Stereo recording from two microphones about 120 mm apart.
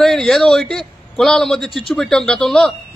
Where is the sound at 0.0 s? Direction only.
5° left (ahead or behind).